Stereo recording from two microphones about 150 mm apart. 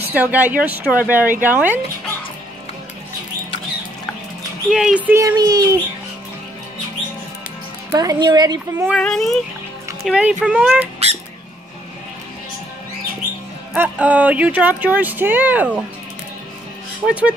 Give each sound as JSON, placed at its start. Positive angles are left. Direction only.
{"t": 0.1, "sound": "speech", "side_deg": -10}
{"t": 4.6, "sound": "speech", "side_deg": -5}
{"t": 7.9, "sound": "a woman's voice", "side_deg": -25}
{"t": 8.9, "sound": "speech", "side_deg": 5}
{"t": 13.7, "sound": "speech", "side_deg": -10}
{"t": 17.0, "sound": "speech", "side_deg": -10}